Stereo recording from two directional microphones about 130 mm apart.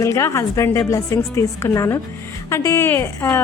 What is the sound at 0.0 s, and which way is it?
Speech, 20° left (ahead or behind).